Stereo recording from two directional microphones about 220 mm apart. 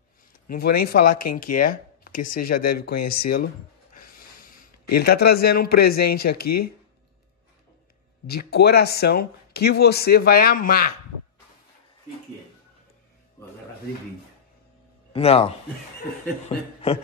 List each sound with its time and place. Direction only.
0.5 s speech: 45° left (ahead or behind)
8.3 s speech: 45° left (ahead or behind)
15.1 s speech: 25° left (ahead or behind)